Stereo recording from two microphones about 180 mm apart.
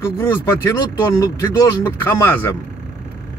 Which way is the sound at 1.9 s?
15° left (ahead or behind).